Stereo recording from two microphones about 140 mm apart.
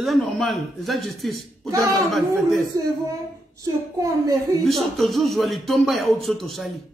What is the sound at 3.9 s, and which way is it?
Speech, 25° right (ahead or behind).